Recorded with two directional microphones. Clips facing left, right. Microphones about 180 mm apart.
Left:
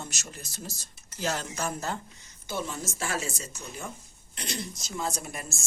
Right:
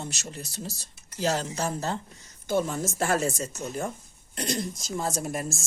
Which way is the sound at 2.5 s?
50° right (ahead or behind).